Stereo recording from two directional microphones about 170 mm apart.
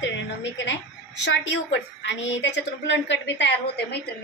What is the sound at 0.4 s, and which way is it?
A woman's voice, 90° left.